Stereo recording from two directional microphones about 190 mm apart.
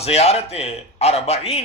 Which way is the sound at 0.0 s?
35° left (ahead or behind).